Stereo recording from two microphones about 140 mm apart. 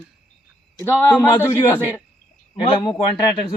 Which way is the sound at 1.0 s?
15° left (ahead or behind).